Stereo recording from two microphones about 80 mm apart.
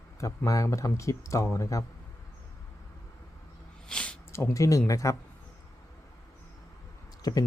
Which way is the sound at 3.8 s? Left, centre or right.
Centre.